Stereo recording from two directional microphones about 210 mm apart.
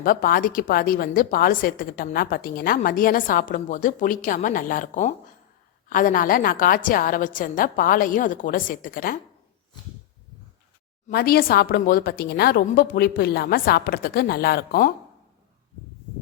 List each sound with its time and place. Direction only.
0.0 s a woman's voice: 45° left (ahead or behind)
11.1 s a woman's voice: 45° left (ahead or behind)